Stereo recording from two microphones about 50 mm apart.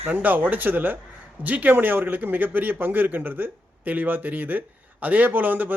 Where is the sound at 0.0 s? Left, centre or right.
Right.